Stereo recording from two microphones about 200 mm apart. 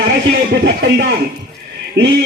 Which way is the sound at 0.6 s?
55° right (ahead or behind).